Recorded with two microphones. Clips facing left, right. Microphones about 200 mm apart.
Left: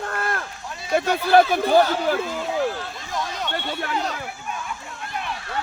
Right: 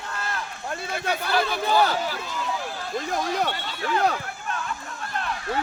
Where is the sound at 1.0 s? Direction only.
60° left (ahead or behind).